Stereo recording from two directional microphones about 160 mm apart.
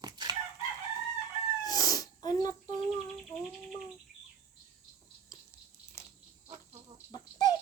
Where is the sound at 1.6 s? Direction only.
25° left (ahead or behind).